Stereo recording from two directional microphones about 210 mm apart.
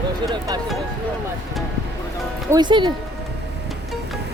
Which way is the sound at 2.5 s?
20° right (ahead or behind).